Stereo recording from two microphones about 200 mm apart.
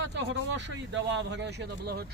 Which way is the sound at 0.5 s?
65° right (ahead or behind).